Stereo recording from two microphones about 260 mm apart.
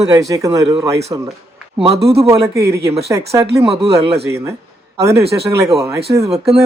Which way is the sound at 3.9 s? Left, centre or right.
Right.